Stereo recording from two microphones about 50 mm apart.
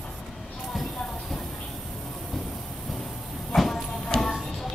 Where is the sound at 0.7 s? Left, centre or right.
Centre.